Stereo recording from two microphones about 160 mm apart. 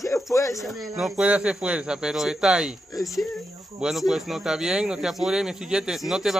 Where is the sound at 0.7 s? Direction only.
Centre (ahead or behind).